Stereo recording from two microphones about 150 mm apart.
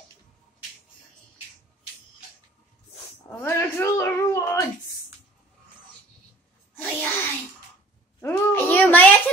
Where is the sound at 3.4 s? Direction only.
20° left (ahead or behind).